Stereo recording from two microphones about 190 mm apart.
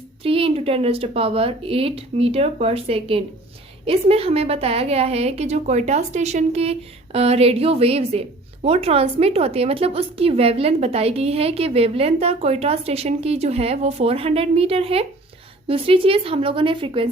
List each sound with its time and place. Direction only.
0.2 s a woman's voice: 30° right (ahead or behind)